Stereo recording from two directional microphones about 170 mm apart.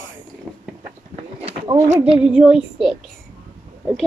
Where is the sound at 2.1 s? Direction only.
5° right (ahead or behind).